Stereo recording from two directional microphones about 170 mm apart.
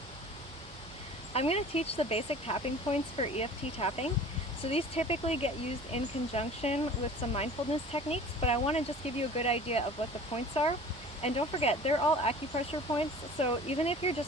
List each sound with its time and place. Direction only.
1.3 s speech: 35° left (ahead or behind)